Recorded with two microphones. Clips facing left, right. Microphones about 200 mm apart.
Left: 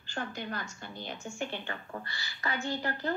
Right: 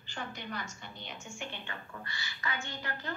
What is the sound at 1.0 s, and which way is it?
A woman's voice, 35° left (ahead or behind).